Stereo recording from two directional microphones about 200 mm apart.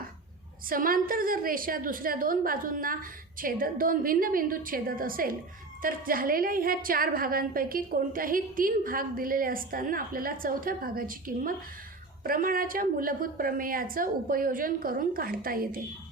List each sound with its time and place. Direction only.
0.7 s a woman's voice: 45° right (ahead or behind)